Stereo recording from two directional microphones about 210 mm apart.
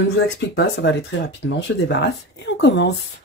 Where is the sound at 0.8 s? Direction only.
60° left (ahead or behind).